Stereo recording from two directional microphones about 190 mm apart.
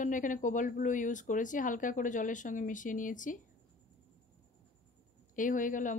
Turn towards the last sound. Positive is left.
turn(degrees=45)  # may be behind; listen again after turning